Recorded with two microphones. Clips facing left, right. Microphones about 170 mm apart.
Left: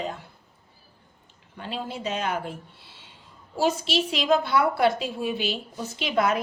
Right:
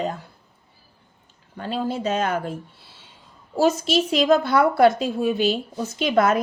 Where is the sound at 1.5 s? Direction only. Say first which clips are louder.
Right 7 dB; 40° right (ahead or behind).